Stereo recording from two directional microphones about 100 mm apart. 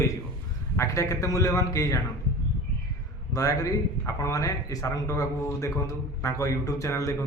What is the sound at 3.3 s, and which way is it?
Speech, 35° left (ahead or behind).